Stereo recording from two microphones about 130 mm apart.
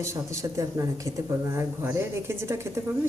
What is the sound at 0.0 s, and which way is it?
Speech, 25° right (ahead or behind).